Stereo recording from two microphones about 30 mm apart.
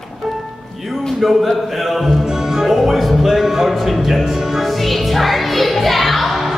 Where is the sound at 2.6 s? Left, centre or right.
Centre.